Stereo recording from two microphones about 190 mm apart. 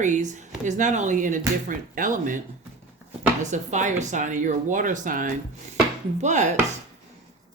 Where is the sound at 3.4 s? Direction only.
40° right (ahead or behind).